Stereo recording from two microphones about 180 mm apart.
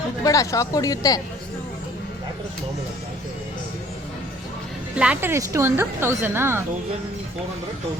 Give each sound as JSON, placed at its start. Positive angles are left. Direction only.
{"t": 0.2, "sound": "speech", "side_deg": 20}
{"t": 4.9, "sound": "a woman's voice", "side_deg": -10}